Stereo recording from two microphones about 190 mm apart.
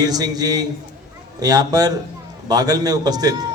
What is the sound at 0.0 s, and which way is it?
A man's voice, 20° right (ahead or behind).